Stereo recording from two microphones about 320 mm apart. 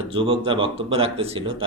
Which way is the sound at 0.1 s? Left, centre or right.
Centre.